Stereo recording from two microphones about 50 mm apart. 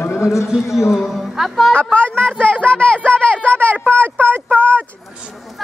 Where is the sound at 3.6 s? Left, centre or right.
Right.